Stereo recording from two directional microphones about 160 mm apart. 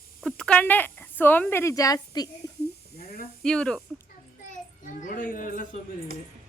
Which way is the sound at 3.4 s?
5° left (ahead or behind).